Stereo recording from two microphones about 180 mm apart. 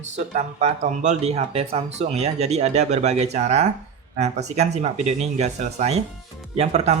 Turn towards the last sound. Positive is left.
turn(degrees=-40)  # may be behind; listen again after turning